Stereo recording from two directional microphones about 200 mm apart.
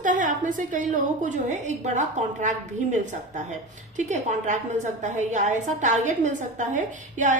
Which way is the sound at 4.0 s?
35° right (ahead or behind).